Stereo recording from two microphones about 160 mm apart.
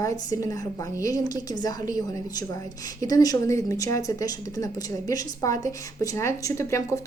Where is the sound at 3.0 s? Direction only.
25° left (ahead or behind).